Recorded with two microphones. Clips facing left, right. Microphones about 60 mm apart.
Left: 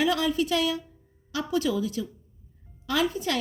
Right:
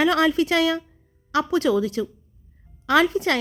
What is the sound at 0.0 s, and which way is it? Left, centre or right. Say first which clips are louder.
A woman's voice: right 6 dB; right.